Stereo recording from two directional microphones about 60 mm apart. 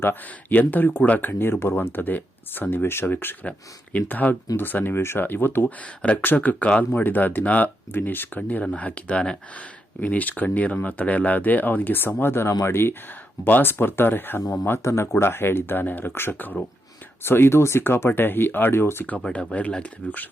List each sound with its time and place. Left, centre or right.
0.0 s speech: left
5.8 s speech: centre; by 14.4 s left
14.7 s speech: left
19.3 s speech: centre